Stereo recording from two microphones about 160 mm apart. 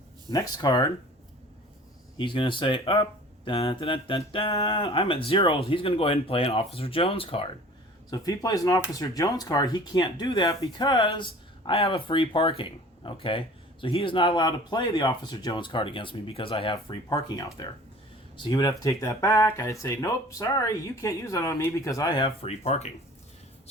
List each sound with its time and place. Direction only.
0.3 s speech: 25° left (ahead or behind)
2.1 s speech: 30° left (ahead or behind)
8.1 s speech: 25° left (ahead or behind); by 22.9 s 45° left (ahead or behind)